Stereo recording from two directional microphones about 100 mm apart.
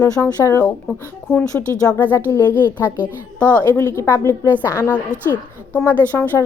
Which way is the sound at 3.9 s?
25° left (ahead or behind).